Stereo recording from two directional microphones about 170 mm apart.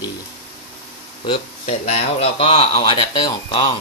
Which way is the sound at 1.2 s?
35° left (ahead or behind).